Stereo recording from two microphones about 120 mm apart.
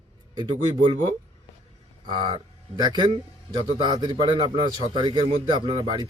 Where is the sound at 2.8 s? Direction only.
35° right (ahead or behind).